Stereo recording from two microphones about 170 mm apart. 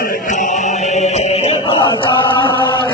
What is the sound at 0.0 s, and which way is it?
Music, 55° left (ahead or behind).